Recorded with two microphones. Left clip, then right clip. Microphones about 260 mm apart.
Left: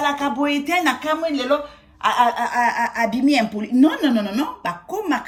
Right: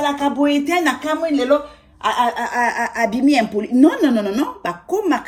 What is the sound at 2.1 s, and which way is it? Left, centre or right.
Speech, left.